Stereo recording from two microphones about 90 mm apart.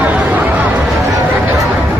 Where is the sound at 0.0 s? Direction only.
15° right (ahead or behind).